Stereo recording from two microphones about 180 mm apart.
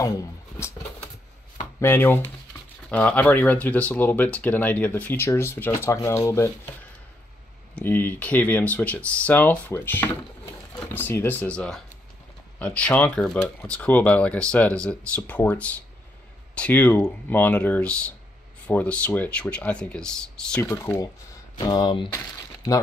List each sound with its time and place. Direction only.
0.0 s speech: 15° left (ahead or behind)
1.8 s speech: 10° left (ahead or behind)
7.7 s speech: 10° left (ahead or behind); by 22.1 s 25° left (ahead or behind)